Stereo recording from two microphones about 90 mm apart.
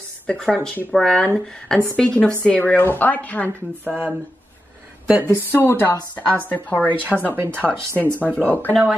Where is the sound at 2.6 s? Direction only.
25° left (ahead or behind).